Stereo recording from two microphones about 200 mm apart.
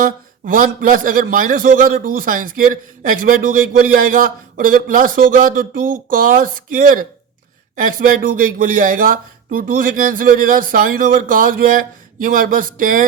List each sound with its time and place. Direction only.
0.0 s a man's voice: 45° right (ahead or behind)